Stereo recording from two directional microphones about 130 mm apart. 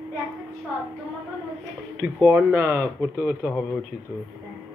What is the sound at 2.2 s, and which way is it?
Speech, 20° right (ahead or behind).